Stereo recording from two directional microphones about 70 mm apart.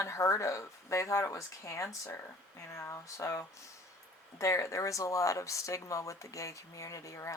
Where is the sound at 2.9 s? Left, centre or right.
Left.